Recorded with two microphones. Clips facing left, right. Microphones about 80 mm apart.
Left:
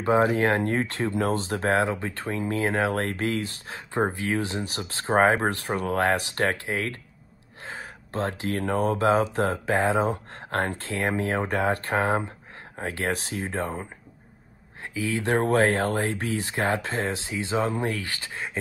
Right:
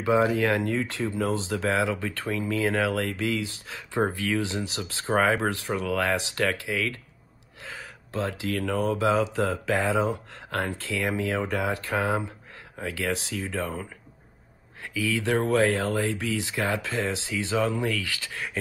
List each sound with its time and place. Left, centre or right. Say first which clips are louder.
0.0 s speech: left 1 dB; left
3.3 s speech: left 1 dB; left
3.9 s speech: even; left
5.9 s speech: left 3 dB; left
7.6 s a sound: left 3 dB; left
8.7 s speech: left 2 dB; left
11.4 s speech: left 3 dB; left